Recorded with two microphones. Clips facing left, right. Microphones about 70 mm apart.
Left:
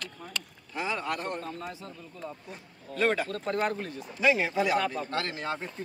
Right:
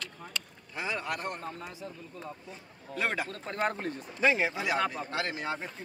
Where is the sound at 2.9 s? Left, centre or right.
Centre.